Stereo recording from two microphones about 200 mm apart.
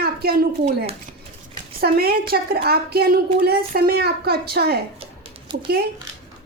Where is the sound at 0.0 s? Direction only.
50° right (ahead or behind).